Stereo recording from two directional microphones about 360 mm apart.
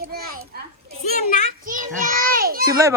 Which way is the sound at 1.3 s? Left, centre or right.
Centre.